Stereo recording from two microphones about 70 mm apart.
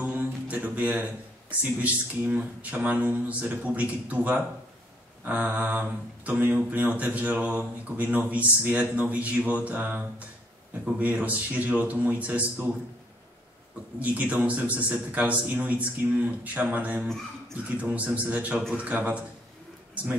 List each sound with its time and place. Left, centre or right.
0.0 s a sound: right
1.6 s speech: right
13.9 s speech: centre